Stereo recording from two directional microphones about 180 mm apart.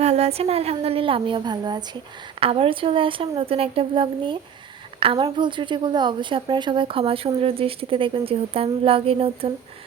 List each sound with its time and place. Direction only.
0.0 s a woman's voice: 35° right (ahead or behind)